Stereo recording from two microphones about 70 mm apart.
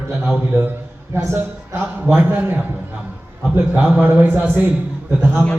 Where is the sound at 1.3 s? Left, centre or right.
Right.